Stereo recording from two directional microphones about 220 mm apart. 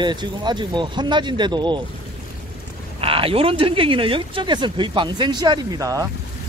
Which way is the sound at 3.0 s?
25° right (ahead or behind).